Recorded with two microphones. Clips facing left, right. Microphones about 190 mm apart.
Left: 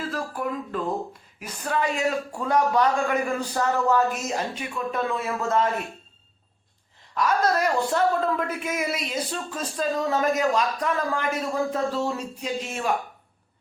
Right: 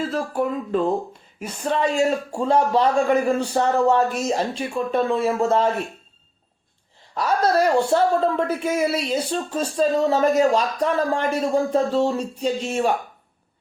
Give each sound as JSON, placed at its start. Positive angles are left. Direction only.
{"t": 0.1, "sound": "a man's voice", "side_deg": -25}
{"t": 7.1, "sound": "speech", "side_deg": -30}